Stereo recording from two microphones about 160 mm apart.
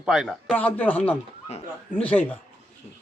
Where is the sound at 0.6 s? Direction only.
10° left (ahead or behind).